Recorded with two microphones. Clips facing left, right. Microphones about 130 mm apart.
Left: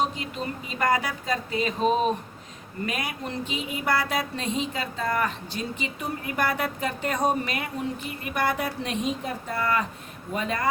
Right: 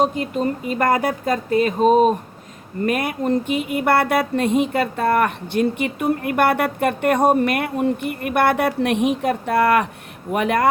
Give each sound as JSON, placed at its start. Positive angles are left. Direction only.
{"t": 0.0, "sound": "speech", "side_deg": -50}